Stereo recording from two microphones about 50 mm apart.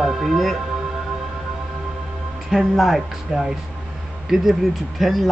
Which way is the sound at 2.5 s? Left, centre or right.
Centre.